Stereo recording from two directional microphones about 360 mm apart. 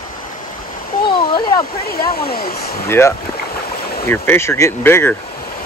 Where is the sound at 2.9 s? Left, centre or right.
Centre.